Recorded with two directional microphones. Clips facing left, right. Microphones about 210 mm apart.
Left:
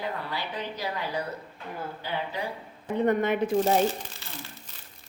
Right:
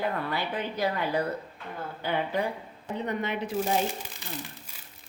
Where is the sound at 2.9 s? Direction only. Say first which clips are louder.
Left 7 dB; 50° left (ahead or behind).